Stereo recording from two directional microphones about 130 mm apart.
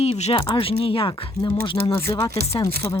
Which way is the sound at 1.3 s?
35° left (ahead or behind).